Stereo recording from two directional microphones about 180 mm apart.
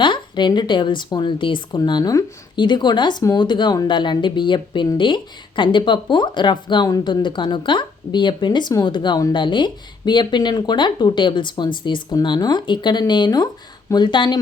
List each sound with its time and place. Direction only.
0.0 s a woman's voice: 25° left (ahead or behind)